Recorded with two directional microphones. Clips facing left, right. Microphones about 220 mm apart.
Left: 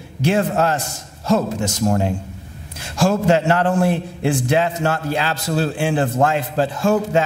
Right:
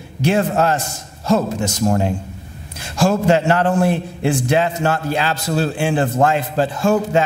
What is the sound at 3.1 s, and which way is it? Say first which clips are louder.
A man's voice: right 1 dB; 15° right (ahead or behind).